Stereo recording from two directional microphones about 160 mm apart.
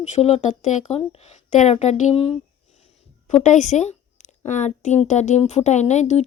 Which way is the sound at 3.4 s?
45° left (ahead or behind).